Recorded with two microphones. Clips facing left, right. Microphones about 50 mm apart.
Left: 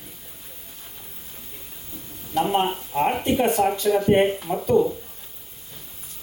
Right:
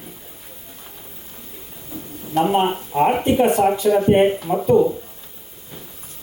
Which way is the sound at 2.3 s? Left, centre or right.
Right.